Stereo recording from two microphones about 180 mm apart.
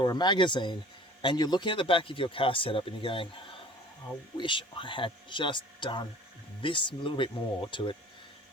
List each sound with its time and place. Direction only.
0.0 s speech: 25° left (ahead or behind)
4.4 s speech: 25° left (ahead or behind)